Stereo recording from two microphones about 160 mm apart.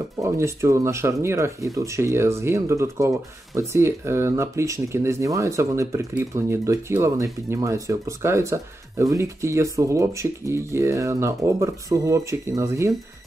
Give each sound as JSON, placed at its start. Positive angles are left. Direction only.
{"t": 0.2, "sound": "speech", "side_deg": -15}